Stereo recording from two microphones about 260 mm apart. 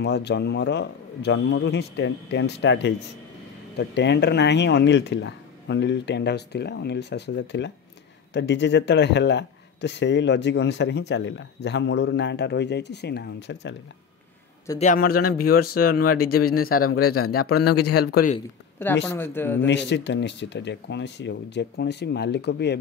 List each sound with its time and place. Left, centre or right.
0.0 s speech: left
14.8 s speech: left
16.7 s speech: left
18.1 s speech: left
19.0 s speech: centre
19.6 s speech: left